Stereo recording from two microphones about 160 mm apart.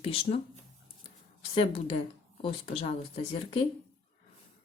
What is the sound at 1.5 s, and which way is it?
Speech, 35° left (ahead or behind).